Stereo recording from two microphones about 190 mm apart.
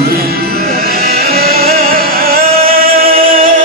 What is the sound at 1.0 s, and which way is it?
Music, 55° right (ahead or behind).